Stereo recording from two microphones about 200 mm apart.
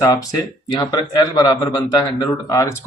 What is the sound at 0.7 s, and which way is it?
A man's voice, 20° left (ahead or behind).